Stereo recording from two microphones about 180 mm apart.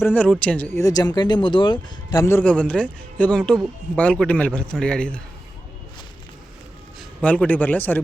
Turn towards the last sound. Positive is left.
turn(degrees=10)  # may be behind; listen again after turning